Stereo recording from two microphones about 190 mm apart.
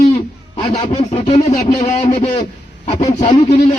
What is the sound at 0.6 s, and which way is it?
A man's voice, 30° left (ahead or behind).